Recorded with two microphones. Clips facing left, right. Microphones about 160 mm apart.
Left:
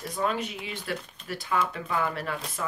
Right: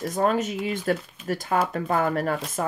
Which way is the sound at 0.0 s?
45° right (ahead or behind).